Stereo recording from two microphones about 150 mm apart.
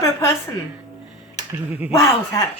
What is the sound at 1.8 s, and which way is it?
Speech, 15° right (ahead or behind).